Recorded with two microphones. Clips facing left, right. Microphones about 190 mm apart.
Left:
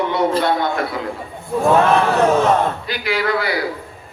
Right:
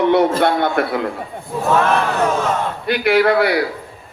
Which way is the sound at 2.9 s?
60° right (ahead or behind).